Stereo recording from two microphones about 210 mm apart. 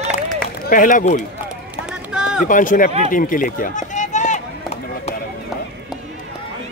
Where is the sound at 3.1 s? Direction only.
40° left (ahead or behind).